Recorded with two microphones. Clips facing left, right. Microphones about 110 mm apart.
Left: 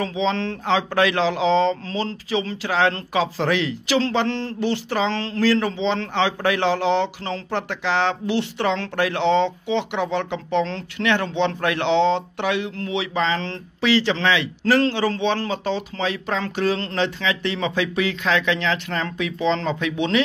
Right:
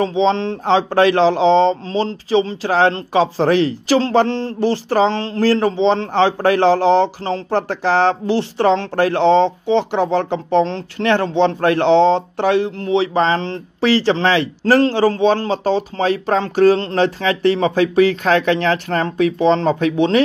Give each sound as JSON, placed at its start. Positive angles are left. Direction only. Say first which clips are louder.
{"t": 0.0, "sound": "speech", "louder": "right 7 dB", "side_deg": -30}